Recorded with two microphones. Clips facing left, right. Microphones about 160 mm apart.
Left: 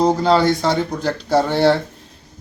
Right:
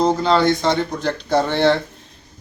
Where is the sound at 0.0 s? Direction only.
10° left (ahead or behind).